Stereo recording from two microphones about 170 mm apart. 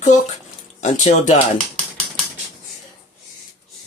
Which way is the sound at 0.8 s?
45° left (ahead or behind).